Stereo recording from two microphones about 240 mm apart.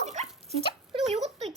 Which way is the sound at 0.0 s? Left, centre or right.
Right.